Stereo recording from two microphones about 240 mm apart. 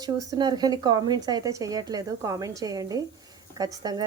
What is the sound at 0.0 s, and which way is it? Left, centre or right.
A woman's voice, centre.